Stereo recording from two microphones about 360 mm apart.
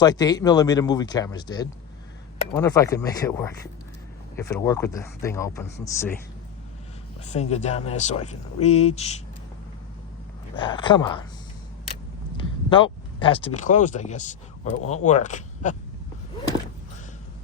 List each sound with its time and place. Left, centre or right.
0.0 s speech: centre
7.3 s speech: centre
10.5 s speech: centre
12.7 s speech: centre